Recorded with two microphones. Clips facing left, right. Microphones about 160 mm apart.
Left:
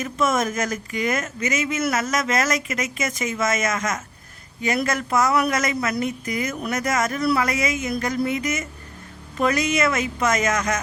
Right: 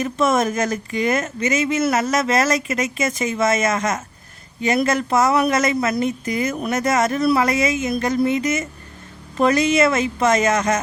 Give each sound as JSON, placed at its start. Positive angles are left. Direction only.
{"t": 0.0, "sound": "speech", "side_deg": -30}